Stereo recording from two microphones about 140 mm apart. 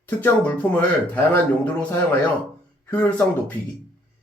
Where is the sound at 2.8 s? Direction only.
10° left (ahead or behind).